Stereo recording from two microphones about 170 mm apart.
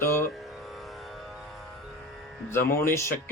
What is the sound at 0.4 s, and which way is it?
Music, centre (ahead or behind).